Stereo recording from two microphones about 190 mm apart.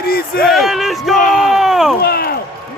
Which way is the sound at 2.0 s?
55° left (ahead or behind).